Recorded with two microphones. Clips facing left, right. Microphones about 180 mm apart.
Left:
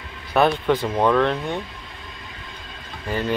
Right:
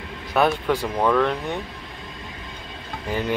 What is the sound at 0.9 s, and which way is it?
Speech, 10° left (ahead or behind).